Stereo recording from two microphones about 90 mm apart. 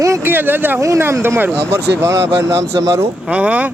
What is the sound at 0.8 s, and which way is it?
A man's voice, 35° right (ahead or behind).